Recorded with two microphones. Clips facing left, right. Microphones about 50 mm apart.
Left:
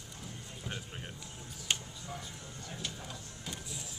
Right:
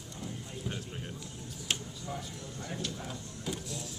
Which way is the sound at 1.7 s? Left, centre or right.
Centre.